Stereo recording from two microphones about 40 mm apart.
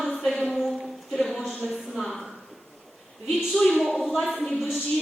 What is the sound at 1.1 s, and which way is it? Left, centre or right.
A woman's voice, centre.